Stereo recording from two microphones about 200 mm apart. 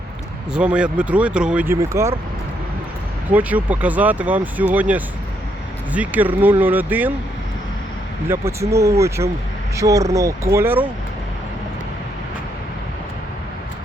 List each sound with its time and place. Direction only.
0.5 s speech: 5° right (ahead or behind)
3.2 s speech: 10° right (ahead or behind)
8.7 s speech: 15° right (ahead or behind)